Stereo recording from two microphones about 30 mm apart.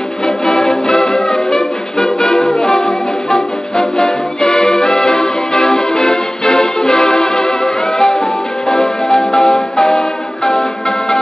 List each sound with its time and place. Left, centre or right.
0.5 s music: centre